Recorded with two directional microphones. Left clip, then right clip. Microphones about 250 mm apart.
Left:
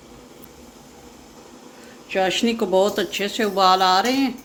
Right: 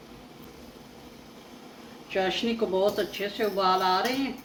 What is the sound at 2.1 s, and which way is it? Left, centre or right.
Speech, left.